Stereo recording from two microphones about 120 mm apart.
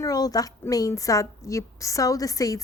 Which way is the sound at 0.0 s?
30° left (ahead or behind).